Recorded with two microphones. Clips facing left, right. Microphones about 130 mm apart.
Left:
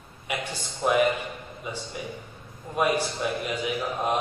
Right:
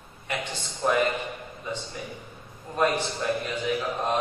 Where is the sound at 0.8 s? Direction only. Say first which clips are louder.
Left 2 dB; 10° left (ahead or behind).